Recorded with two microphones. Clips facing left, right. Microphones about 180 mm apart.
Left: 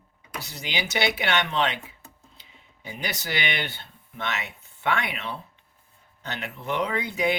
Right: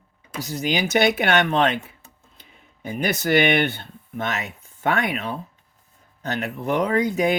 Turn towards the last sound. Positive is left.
turn(degrees=-45)  # may be behind; listen again after turning